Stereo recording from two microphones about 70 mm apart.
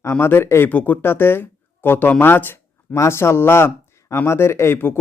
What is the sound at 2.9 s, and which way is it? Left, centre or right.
Speech, left.